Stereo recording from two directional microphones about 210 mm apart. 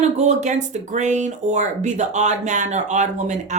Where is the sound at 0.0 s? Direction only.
35° right (ahead or behind).